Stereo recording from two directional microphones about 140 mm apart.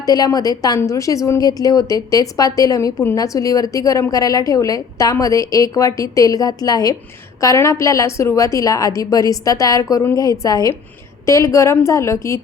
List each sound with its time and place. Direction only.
0.0 s a woman's voice: 25° left (ahead or behind)